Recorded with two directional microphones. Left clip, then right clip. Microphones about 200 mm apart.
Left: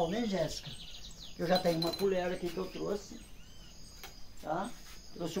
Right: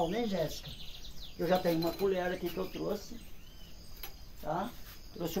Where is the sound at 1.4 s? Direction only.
Centre (ahead or behind).